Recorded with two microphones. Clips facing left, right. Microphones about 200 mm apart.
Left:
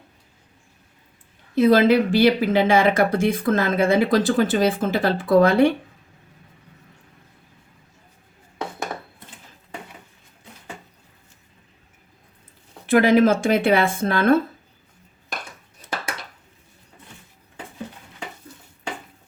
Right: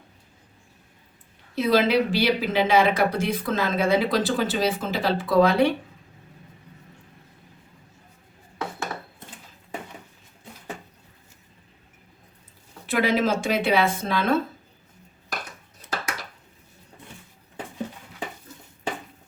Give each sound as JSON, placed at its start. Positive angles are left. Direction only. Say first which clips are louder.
{"t": 1.5, "sound": "speech", "louder": "left 5 dB", "side_deg": 50}
{"t": 12.8, "sound": "speech", "louder": "left 7 dB", "side_deg": 55}